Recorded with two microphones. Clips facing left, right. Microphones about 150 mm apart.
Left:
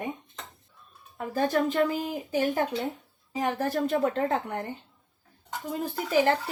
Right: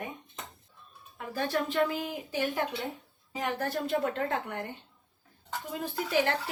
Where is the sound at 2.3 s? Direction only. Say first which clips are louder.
Left 5 dB; 40° left (ahead or behind).